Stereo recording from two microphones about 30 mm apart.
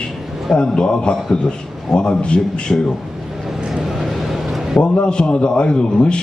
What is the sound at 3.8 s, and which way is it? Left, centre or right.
Vehicle, centre.